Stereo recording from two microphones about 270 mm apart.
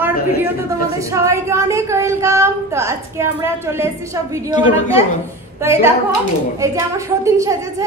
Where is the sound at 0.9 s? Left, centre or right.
Centre.